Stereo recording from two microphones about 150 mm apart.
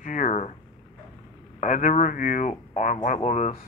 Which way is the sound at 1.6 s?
60° left (ahead or behind).